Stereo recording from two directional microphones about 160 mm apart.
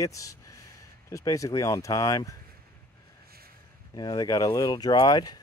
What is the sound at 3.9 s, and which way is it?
Speech, 25° left (ahead or behind).